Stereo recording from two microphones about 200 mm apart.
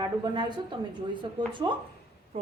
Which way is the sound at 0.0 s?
20° right (ahead or behind).